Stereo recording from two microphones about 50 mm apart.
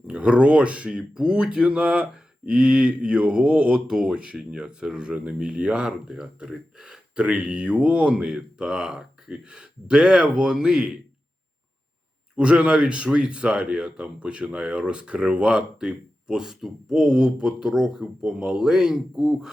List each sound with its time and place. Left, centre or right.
0.1 s speech: right
3.8 s speech: centre
12.4 s speech: centre